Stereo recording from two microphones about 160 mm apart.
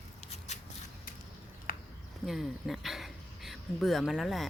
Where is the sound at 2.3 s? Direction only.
Centre (ahead or behind).